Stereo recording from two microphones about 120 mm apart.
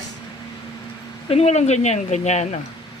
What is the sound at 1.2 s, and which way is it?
Speech, 60° left (ahead or behind).